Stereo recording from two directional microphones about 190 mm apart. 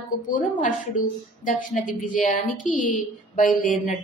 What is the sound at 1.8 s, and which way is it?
Speech, 45° left (ahead or behind).